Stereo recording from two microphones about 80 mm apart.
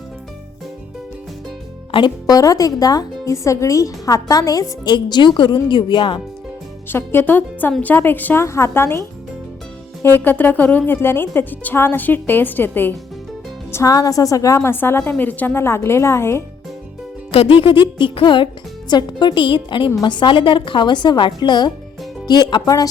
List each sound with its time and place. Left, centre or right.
1.9 s speech: left
2.2 s a woman's voice: left
4.9 s a woman's voice: left
6.8 s speech: left
8.4 s a woman's voice: left
10.0 s speech: left
13.8 s a woman's voice: left
14.7 s a woman's voice: left
17.6 s music: left
18.9 s a woman's voice: left